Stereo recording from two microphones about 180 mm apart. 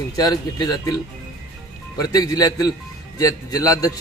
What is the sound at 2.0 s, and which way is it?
A man's voice, 20° left (ahead or behind).